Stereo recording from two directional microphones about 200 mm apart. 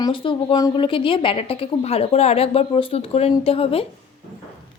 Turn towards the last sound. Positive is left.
turn(degrees=30)  # may be behind; listen again after turning